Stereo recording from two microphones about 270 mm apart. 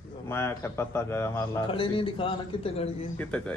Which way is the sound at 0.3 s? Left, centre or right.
Centre.